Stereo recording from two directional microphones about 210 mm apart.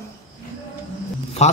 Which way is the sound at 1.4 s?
30° left (ahead or behind).